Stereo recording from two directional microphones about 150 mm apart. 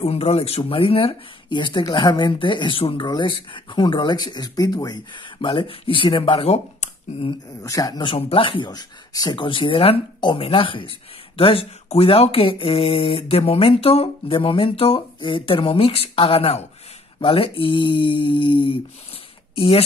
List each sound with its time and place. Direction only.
0.0 s speech: 40° left (ahead or behind)
7.6 s speech: 25° left (ahead or behind); by 19.8 s 40° left (ahead or behind)